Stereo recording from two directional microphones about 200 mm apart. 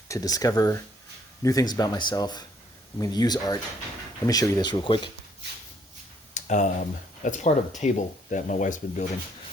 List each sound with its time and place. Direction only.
0.1 s speech: 15° left (ahead or behind)
6.3 s speech: 35° left (ahead or behind)